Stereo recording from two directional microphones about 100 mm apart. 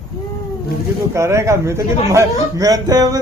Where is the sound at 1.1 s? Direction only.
30° right (ahead or behind).